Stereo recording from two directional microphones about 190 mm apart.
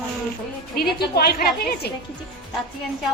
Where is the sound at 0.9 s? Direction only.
55° left (ahead or behind).